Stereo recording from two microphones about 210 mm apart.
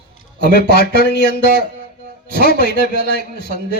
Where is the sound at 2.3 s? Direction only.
45° right (ahead or behind).